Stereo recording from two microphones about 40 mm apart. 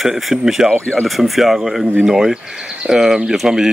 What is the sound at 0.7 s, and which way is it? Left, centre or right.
Speech, left.